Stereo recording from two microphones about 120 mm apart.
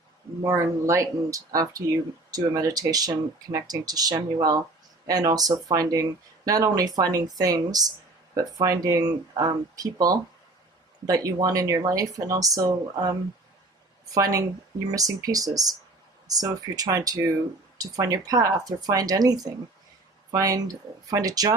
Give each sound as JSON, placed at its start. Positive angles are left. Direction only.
{"t": 0.4, "sound": "a woman's voice", "side_deg": -25}